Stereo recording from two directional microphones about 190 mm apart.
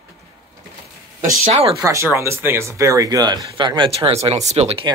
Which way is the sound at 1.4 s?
35° right (ahead or behind).